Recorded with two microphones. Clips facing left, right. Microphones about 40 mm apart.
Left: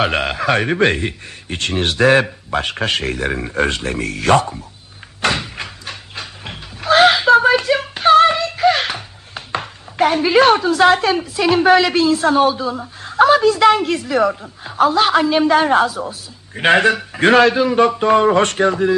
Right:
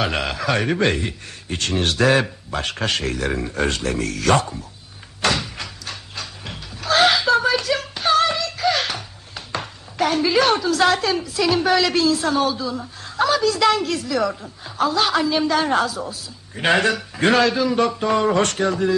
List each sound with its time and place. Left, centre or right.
0.0 s a woman's voice: left
5.2 s goat: left
13.5 s a woman's voice: left